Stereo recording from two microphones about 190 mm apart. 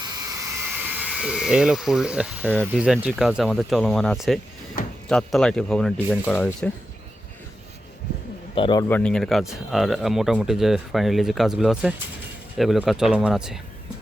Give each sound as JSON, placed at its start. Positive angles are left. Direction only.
{"t": 0.0, "sound": "a sound", "side_deg": -20}
{"t": 2.7, "sound": "speech", "side_deg": -5}
{"t": 8.5, "sound": "a man's voice", "side_deg": 25}
{"t": 8.9, "sound": "speech", "side_deg": 5}